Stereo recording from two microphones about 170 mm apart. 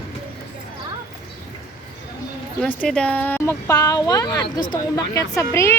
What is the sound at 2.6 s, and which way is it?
Speech, 5° left (ahead or behind).